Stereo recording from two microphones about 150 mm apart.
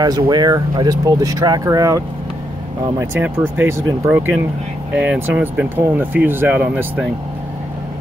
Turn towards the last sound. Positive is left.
turn(degrees=-10)  # may be behind; listen again after turning